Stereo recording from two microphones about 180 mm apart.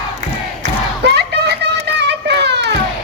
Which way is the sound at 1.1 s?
70° right (ahead or behind).